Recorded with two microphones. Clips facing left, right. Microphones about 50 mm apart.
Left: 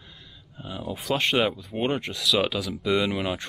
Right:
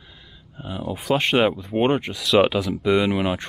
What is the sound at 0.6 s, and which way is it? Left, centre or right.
Speech, centre.